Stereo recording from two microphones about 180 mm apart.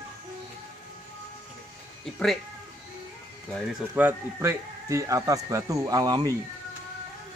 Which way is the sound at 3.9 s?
15° right (ahead or behind).